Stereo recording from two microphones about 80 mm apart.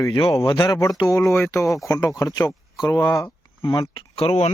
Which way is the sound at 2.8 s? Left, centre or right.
Left.